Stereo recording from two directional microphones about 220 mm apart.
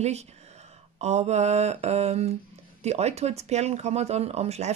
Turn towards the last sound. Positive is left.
turn(degrees=-30)  # may be behind; listen again after turning